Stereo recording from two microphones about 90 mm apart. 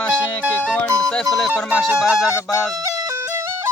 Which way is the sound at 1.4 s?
Centre (ahead or behind).